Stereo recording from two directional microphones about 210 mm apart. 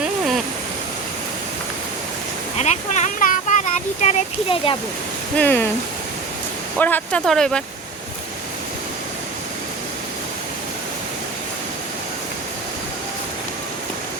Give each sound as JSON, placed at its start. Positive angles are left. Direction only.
{"t": 2.6, "sound": "speech", "side_deg": 35}
{"t": 5.4, "sound": "speech", "side_deg": 10}
{"t": 6.7, "sound": "speech", "side_deg": 10}